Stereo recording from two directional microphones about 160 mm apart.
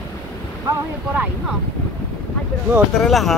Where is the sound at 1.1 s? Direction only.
10° right (ahead or behind).